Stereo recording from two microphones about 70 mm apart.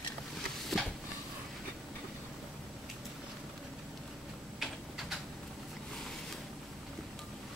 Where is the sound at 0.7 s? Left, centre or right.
Centre.